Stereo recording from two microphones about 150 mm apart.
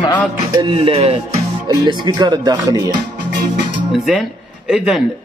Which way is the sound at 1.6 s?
30° right (ahead or behind).